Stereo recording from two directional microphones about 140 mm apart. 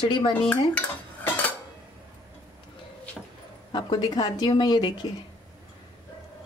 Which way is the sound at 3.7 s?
30° left (ahead or behind).